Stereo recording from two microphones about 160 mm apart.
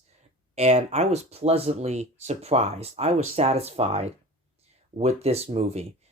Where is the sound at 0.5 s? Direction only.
45° right (ahead or behind).